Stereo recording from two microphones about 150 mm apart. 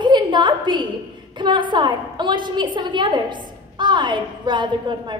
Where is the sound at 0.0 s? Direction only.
30° right (ahead or behind).